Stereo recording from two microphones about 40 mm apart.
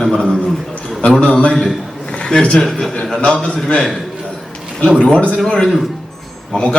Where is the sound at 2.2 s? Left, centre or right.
Centre.